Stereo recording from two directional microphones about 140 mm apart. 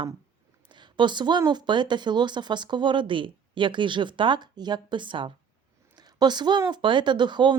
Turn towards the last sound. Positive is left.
turn(degrees=-35)  # may be behind; listen again after turning